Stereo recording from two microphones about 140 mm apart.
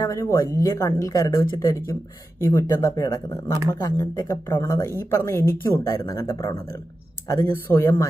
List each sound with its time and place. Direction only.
0.0 s speech: 20° left (ahead or behind)